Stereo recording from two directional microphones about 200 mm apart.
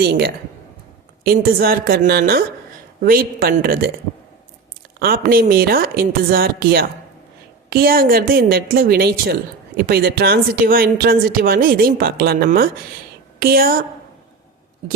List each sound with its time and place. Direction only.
0.0 s a woman's voice: 50° right (ahead or behind)
4.9 s a woman's voice: 50° right (ahead or behind)